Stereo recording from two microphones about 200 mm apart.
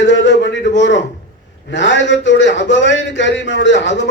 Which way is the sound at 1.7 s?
65° left (ahead or behind).